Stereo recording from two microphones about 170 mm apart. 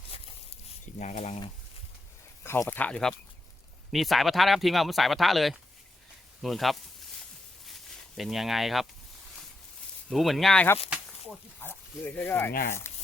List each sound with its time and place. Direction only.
0.9 s speech: 45° left (ahead or behind)
2.4 s speech: 15° left (ahead or behind); by 8.9 s centre (ahead or behind)
10.1 s speech: centre (ahead or behind)
10.8 s a sound: 5° right (ahead or behind)
11.6 s speech: 10° left (ahead or behind)